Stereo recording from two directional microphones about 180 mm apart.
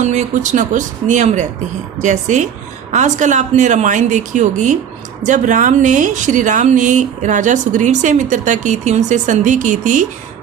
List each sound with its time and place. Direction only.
0.0 s speech: 40° right (ahead or behind)